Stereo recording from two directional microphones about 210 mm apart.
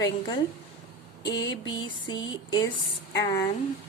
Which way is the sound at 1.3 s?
60° left (ahead or behind).